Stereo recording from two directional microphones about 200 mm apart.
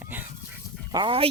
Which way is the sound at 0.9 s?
25° right (ahead or behind).